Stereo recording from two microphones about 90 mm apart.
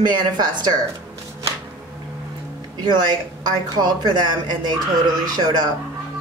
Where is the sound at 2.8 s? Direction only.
50° right (ahead or behind).